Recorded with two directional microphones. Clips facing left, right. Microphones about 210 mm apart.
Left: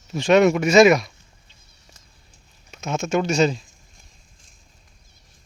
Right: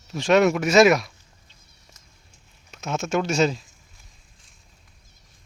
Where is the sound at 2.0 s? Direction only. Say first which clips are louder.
Left 2 dB; 30° left (ahead or behind).